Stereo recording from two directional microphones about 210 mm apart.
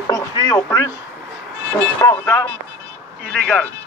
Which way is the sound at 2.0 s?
15° left (ahead or behind).